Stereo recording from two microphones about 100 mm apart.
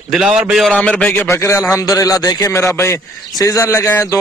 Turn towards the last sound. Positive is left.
turn(degrees=30)  # may be behind; listen again after turning